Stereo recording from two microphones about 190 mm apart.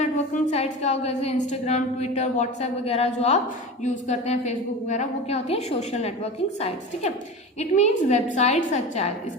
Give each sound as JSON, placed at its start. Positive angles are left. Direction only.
{"t": 0.0, "sound": "a woman's voice", "side_deg": 35}
{"t": 7.6, "sound": "a woman's voice", "side_deg": 35}